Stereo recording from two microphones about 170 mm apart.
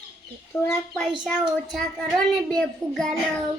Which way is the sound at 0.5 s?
15° left (ahead or behind).